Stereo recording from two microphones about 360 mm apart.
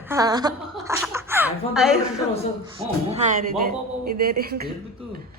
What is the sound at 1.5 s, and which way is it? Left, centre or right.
Speech, centre.